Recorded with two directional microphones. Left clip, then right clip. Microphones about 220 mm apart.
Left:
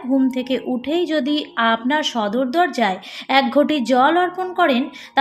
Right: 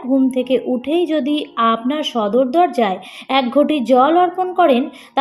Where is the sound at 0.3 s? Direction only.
15° left (ahead or behind).